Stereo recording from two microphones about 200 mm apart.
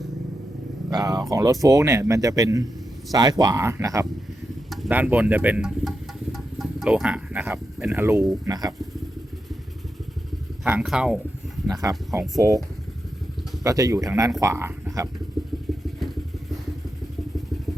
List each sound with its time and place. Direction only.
0.9 s speech: 20° right (ahead or behind)
4.7 s speech: 5° right (ahead or behind)
6.3 s a sound: centre (ahead or behind)
8.4 s speech: 20° right (ahead or behind)
10.6 s speech: 5° right (ahead or behind)
11.7 s speech: 15° right (ahead or behind)
13.7 s speech: 15° right (ahead or behind)